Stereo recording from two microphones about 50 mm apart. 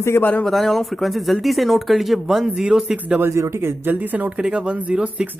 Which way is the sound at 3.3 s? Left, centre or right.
Right.